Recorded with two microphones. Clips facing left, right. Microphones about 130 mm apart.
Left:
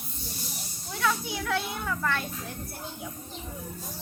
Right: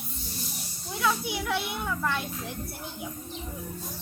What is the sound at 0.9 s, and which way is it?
A child's voice, 15° right (ahead or behind).